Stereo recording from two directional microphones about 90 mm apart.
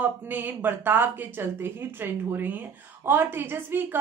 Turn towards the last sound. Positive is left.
turn(degrees=-25)  # may be behind; listen again after turning